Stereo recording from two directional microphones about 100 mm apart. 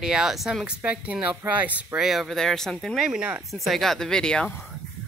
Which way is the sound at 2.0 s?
Centre (ahead or behind).